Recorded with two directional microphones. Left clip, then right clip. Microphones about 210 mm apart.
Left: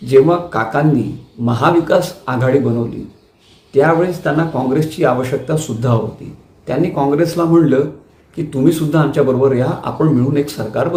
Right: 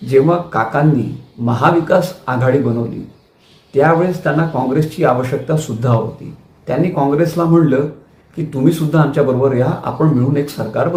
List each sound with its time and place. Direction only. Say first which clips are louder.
0.1 s speech: left 2 dB; 5° left (ahead or behind)
3.7 s speech: even; 5° left (ahead or behind)